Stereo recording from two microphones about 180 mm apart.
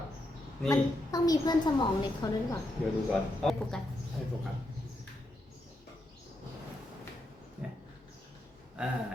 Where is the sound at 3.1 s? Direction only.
5° left (ahead or behind).